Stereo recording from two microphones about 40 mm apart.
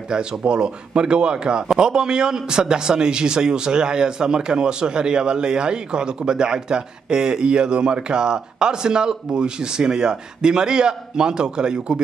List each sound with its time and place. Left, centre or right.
0.1 s a man's voice: right